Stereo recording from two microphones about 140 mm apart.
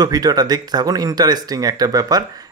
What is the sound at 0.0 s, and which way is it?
Speech, 25° right (ahead or behind).